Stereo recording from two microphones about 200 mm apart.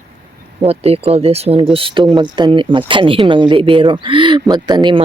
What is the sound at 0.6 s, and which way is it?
Speech, 30° right (ahead or behind).